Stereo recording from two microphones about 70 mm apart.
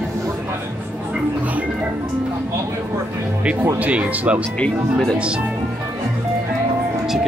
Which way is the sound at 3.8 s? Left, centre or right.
Centre.